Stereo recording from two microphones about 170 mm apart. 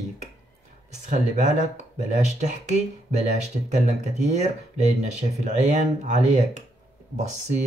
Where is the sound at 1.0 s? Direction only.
45° right (ahead or behind).